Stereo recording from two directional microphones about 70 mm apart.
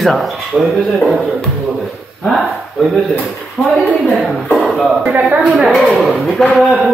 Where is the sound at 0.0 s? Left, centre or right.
Centre.